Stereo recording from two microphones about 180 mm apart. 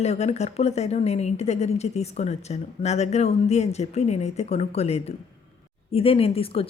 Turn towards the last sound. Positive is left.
turn(degrees=30)  # may be behind; listen again after turning